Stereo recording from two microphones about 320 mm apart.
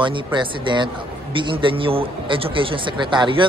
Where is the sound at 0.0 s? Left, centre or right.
Centre.